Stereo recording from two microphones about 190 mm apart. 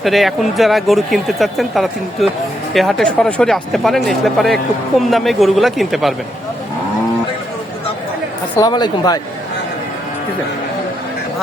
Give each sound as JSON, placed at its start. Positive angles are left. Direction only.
{"t": 0.0, "sound": "speech", "side_deg": 0}
{"t": 8.5, "sound": "speech", "side_deg": 20}